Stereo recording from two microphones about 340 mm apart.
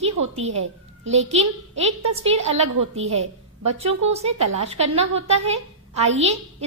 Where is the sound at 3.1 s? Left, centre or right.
Centre.